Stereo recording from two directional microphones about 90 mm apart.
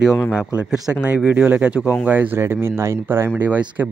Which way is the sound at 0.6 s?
5° right (ahead or behind).